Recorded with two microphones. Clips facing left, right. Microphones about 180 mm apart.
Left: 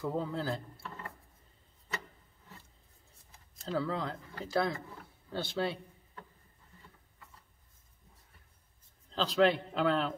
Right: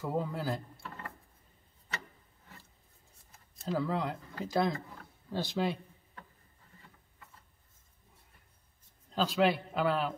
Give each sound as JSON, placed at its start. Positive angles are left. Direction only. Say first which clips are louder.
{"t": 0.0, "sound": "speech", "louder": "even", "side_deg": -10}
{"t": 3.6, "sound": "speech", "louder": "right 1 dB", "side_deg": -10}
{"t": 9.1, "sound": "speech", "louder": "left 1 dB", "side_deg": -10}